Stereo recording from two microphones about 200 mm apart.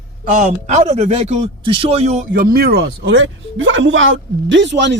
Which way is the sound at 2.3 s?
45° right (ahead or behind).